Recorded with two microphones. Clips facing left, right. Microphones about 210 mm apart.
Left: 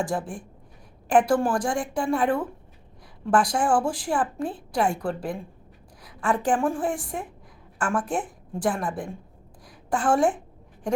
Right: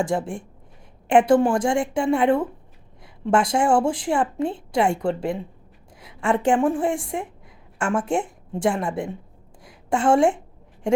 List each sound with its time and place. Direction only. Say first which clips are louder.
0.0 s a woman's voice: right 4 dB; 25° right (ahead or behind)